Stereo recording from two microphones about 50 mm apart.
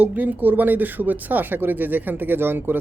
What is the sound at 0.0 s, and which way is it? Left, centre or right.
Speech, right.